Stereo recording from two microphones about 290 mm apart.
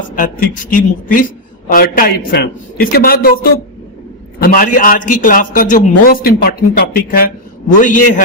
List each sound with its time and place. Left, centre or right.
0.2 s a woman's voice: left
4.4 s a woman's voice: left